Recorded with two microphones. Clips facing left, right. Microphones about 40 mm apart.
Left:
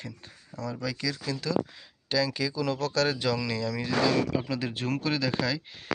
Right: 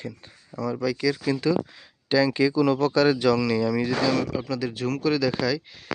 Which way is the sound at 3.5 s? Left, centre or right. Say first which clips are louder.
Right 7 dB; centre.